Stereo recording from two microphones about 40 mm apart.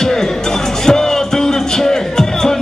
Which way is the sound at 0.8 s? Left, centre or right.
Centre.